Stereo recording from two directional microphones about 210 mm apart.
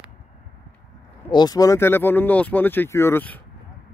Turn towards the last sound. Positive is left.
turn(degrees=10)  # may be behind; listen again after turning